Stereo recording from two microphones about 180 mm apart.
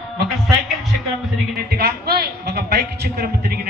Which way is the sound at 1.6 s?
60° right (ahead or behind).